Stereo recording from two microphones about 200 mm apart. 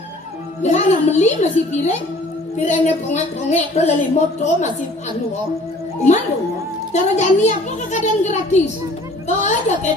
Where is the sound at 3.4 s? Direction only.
35° left (ahead or behind).